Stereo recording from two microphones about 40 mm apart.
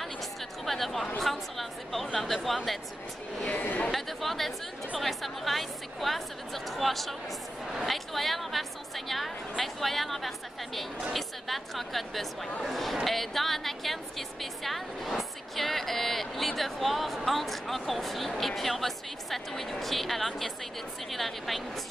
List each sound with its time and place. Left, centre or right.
0.7 s a sound: centre
1.2 s a woman's voice: centre
3.4 s chatter: left
3.9 s a woman's voice: centre